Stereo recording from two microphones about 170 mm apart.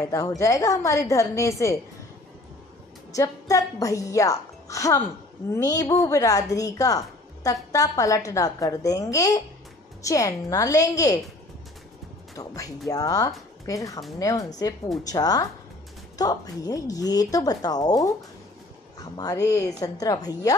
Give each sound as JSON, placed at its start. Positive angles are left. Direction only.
{"t": 0.4, "sound": "a woman's voice", "side_deg": 20}
{"t": 3.1, "sound": "a woman's voice", "side_deg": 20}
{"t": 12.4, "sound": "a woman's voice", "side_deg": 20}